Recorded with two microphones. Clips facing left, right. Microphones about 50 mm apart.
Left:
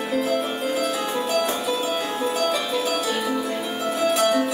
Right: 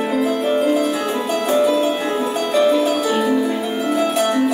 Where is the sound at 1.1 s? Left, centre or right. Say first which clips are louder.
Right 4 dB; right.